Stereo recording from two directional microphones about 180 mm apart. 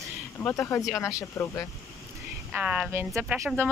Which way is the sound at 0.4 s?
15° left (ahead or behind).